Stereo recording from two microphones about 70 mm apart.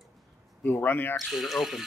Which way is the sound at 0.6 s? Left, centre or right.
Left.